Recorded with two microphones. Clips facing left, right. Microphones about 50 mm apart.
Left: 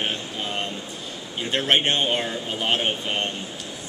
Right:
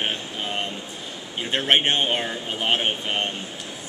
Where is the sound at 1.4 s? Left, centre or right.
Right.